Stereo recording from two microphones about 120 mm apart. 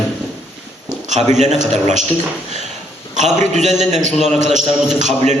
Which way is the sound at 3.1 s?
85° right.